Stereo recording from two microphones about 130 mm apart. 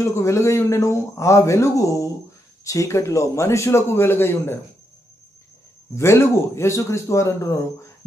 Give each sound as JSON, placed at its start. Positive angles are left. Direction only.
{"t": 0.0, "sound": "speech", "side_deg": 20}
{"t": 5.9, "sound": "speech", "side_deg": 20}